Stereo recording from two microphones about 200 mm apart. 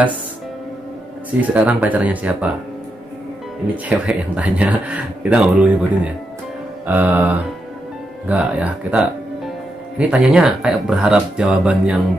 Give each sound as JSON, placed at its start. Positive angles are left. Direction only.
{"t": 1.4, "sound": "speech", "side_deg": -5}
{"t": 3.7, "sound": "speech", "side_deg": -5}